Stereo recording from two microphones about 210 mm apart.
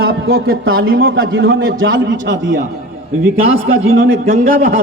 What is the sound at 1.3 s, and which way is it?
A man's voice, 65° right (ahead or behind).